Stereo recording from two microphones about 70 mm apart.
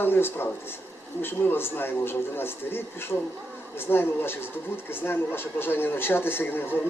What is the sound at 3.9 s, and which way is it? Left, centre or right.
Speech, left.